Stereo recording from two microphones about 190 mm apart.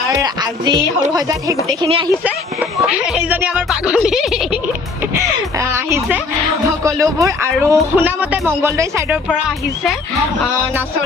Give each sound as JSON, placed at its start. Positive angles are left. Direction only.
{"t": 0.1, "sound": "speech", "side_deg": -20}
{"t": 2.2, "sound": "speech", "side_deg": -5}
{"t": 5.5, "sound": "a sound", "side_deg": -15}
{"t": 6.8, "sound": "speech", "side_deg": -15}